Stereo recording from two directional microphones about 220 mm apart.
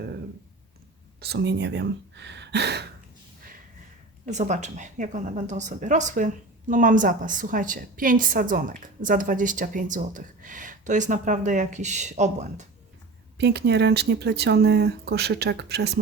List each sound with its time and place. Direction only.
1.2 s speech: 50° right (ahead or behind)
4.3 s a woman's voice: 30° right (ahead or behind)
13.4 s speech: 50° right (ahead or behind)